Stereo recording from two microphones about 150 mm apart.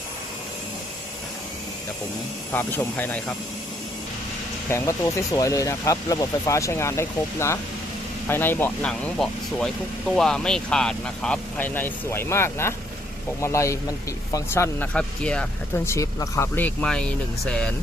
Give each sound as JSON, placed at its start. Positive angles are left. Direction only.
{"t": 2.5, "sound": "speech", "side_deg": 15}
{"t": 4.7, "sound": "speech", "side_deg": 20}